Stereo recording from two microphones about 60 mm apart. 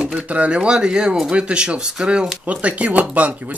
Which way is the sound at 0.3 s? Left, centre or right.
Centre.